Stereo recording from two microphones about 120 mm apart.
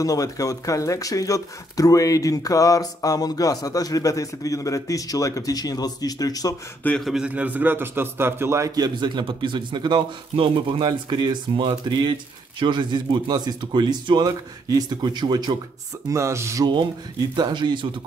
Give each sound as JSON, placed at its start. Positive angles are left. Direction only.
{"t": 0.0, "sound": "speech", "side_deg": 30}
{"t": 7.1, "sound": "a man's voice", "side_deg": -10}
{"t": 16.1, "sound": "a man's voice", "side_deg": -25}
{"t": 17.4, "sound": "speech", "side_deg": -40}